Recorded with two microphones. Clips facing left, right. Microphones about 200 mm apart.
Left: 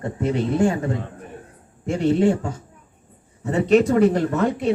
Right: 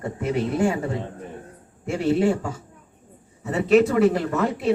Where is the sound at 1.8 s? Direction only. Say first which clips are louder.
Left 2 dB; 5° right (ahead or behind).